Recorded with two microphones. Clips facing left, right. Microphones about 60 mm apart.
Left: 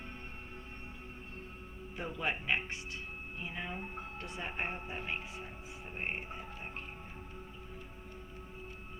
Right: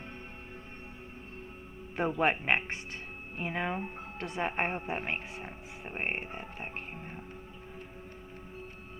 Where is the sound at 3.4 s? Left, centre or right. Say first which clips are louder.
Right 9 dB; right.